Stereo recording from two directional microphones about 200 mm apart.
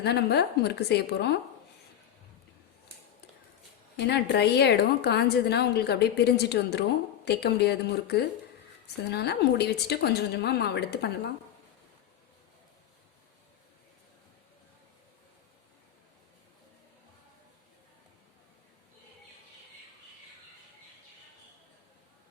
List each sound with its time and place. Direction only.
0.0 s a woman's voice: 55° left (ahead or behind)
3.9 s a woman's voice: 55° left (ahead or behind)